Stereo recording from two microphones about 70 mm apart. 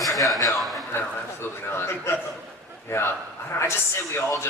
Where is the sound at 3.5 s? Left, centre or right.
Left.